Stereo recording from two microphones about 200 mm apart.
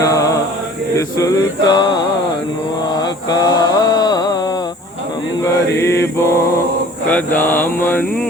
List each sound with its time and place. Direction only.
0.0 s mantra: 15° left (ahead or behind)
0.9 s music: 15° left (ahead or behind)
2.9 s mantra: 20° left (ahead or behind)
5.4 s mantra: 15° left (ahead or behind)